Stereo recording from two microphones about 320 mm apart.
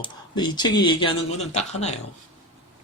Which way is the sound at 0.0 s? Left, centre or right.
Centre.